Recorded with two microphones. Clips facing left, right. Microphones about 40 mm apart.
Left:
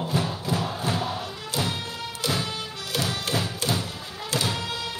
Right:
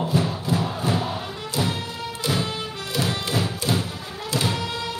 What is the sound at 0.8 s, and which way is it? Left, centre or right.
Music, centre.